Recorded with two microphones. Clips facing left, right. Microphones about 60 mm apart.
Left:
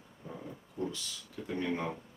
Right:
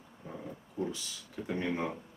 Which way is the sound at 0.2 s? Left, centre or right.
Centre.